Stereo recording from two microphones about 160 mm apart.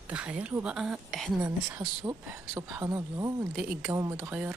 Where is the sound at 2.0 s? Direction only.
20° right (ahead or behind).